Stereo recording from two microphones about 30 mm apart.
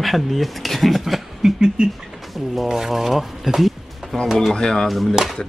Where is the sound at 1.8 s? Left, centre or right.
Right.